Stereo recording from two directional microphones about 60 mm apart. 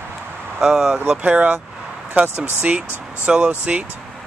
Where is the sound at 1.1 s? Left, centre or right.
Right.